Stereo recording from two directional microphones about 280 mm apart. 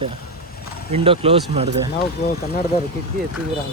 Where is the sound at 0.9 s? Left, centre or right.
Centre.